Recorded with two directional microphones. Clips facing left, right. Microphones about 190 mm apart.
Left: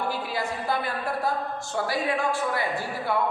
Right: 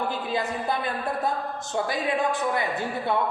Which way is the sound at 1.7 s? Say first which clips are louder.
Right 1 dB; 20° right (ahead or behind).